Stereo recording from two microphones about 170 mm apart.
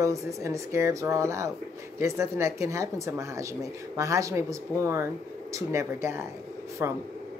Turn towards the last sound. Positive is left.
turn(degrees=-15)  # may be behind; listen again after turning